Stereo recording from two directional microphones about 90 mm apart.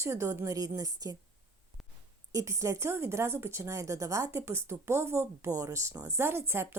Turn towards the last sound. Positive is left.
turn(degrees=-25)  # may be behind; listen again after turning